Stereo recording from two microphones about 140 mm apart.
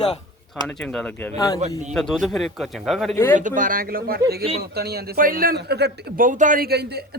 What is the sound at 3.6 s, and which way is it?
Speech, 85° right.